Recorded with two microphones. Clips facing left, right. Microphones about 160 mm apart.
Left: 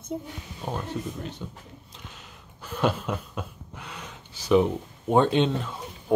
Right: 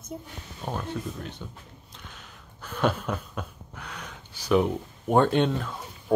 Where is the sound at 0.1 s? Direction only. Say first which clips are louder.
Left 6 dB; 20° left (ahead or behind).